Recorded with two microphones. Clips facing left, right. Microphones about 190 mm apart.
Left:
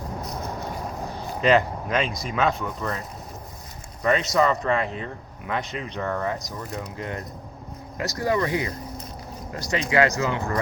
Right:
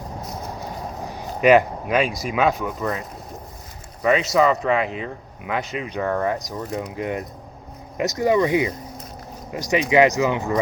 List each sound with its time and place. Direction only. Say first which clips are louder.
1.2 s speech: right 5 dB; 15° right (ahead or behind)
4.0 s speech: right 3 dB; 5° right (ahead or behind)